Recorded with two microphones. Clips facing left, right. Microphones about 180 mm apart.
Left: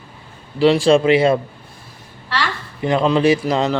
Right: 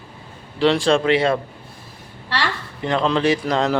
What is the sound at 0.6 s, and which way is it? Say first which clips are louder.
Speech: left 4 dB; 5° left (ahead or behind).